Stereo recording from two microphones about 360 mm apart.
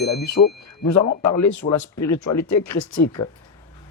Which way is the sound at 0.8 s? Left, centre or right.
Left.